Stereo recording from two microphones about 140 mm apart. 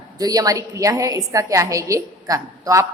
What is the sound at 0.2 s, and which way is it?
A woman's voice, 25° right (ahead or behind).